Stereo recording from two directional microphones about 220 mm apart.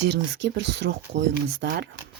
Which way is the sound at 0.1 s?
50° right (ahead or behind).